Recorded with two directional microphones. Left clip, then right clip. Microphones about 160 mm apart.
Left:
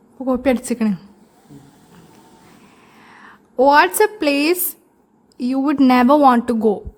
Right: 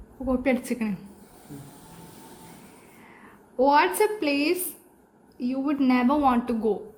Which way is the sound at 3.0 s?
45° left (ahead or behind).